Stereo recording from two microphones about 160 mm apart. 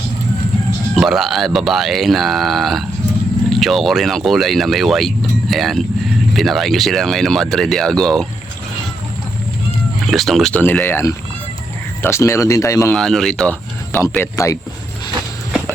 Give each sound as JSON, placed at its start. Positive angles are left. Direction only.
{"t": 0.9, "sound": "speech", "side_deg": 0}
{"t": 10.1, "sound": "speech", "side_deg": 0}
{"t": 12.9, "sound": "speech", "side_deg": 5}